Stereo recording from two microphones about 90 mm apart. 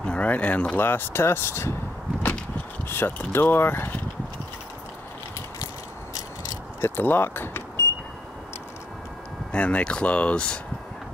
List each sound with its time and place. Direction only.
0.0 s speech: 15° left (ahead or behind)
6.8 s speech: 20° left (ahead or behind)
9.5 s speech: 15° left (ahead or behind)